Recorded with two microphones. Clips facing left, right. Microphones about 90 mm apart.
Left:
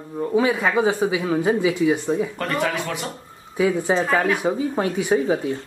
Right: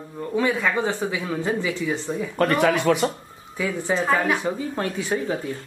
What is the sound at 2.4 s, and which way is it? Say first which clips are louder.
Speech: right 4 dB; 55° right (ahead or behind).